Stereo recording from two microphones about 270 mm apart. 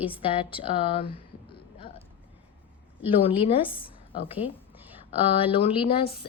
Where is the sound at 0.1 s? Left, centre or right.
Centre.